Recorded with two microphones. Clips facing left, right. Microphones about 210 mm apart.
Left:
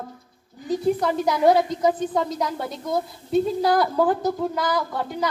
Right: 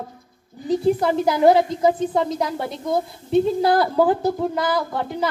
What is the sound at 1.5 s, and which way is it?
A woman's voice, 25° right (ahead or behind).